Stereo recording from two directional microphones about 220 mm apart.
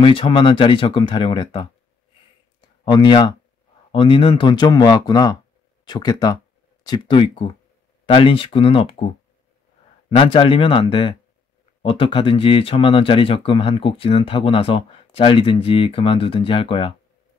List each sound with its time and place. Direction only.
0.0 s speech: 25° left (ahead or behind)
2.8 s speech: 20° left (ahead or behind)